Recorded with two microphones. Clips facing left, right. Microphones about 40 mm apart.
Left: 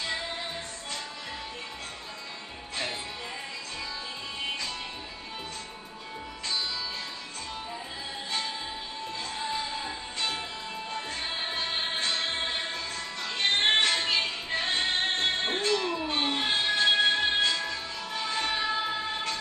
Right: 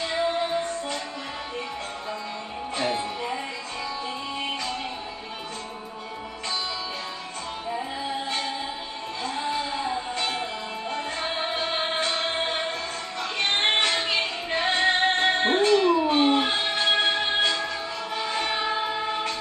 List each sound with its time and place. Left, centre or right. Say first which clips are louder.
0.0 s music: right 8 dB; right
2.8 s music: right 8 dB; right
9.2 s music: right 6 dB; right
15.6 s music: right 9 dB; centre
16.5 s music: right 1 dB; right
16.9 s music: right 2 dB; right